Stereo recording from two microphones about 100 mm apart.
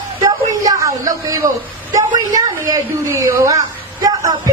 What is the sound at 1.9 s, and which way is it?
Speech, 45° right (ahead or behind).